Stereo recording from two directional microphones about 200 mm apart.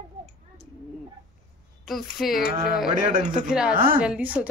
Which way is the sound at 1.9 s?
Centre (ahead or behind).